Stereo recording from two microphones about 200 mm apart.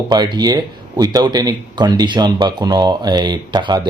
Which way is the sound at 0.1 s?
20° right (ahead or behind).